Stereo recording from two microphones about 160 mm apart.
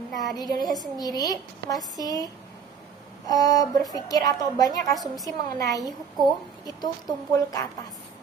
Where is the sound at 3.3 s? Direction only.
25° left (ahead or behind).